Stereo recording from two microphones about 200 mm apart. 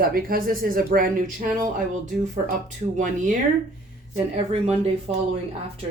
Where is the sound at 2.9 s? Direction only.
40° right (ahead or behind).